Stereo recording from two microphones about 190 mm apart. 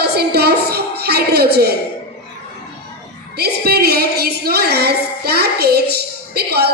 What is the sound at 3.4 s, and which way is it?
Music, 55° right (ahead or behind).